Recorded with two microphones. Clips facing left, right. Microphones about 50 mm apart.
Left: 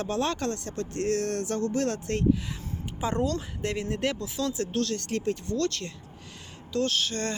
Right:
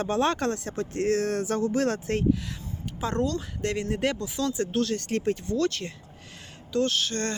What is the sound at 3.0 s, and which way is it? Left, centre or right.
Speech, centre.